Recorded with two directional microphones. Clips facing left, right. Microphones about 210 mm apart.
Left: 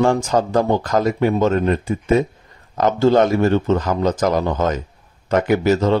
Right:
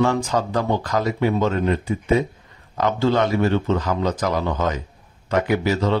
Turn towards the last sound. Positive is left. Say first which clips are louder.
# left 4 dB
turn(degrees=45)  # may be behind; listen again after turning